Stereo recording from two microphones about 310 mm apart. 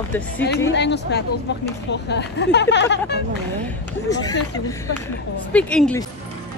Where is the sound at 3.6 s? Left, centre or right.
Centre.